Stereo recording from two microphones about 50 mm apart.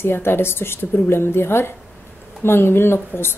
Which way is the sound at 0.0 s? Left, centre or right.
Left.